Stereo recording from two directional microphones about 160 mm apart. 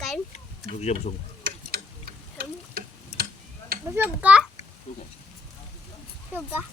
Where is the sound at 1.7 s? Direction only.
70° right (ahead or behind).